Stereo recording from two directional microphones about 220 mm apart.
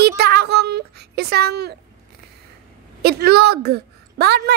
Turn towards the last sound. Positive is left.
turn(degrees=-45)  # may be behind; listen again after turning